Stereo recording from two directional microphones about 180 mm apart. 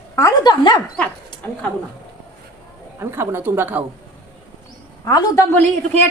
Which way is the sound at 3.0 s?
15° right (ahead or behind).